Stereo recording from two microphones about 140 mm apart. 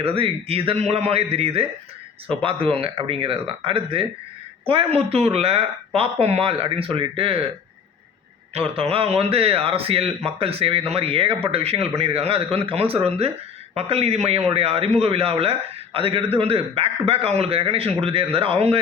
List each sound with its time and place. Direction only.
0.0 s a man's voice: 45° right (ahead or behind)
8.5 s a man's voice: 45° right (ahead or behind)